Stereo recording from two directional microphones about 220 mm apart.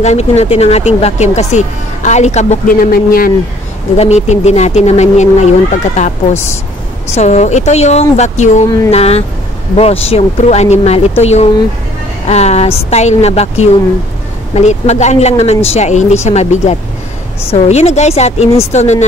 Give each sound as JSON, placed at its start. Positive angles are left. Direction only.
{"t": 0.0, "sound": "a woman's voice", "side_deg": 30}
{"t": 3.9, "sound": "a woman's voice", "side_deg": 30}
{"t": 14.5, "sound": "a woman's voice", "side_deg": 30}